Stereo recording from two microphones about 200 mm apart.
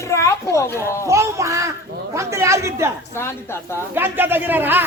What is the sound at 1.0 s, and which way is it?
A man's voice, 15° right (ahead or behind).